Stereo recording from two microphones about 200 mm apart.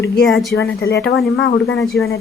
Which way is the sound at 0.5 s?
55° left (ahead or behind).